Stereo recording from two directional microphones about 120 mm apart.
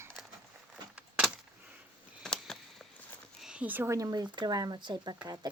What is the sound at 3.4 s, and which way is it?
Speech, 10° right (ahead or behind).